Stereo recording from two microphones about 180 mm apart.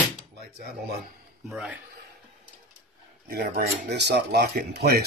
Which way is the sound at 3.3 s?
60° right (ahead or behind).